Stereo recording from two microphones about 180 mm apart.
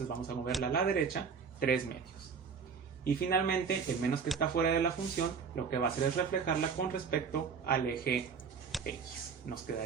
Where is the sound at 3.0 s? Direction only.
55° left (ahead or behind).